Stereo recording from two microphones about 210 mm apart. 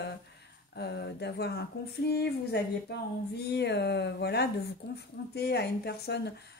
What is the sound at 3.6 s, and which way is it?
A woman's voice, 55° left (ahead or behind).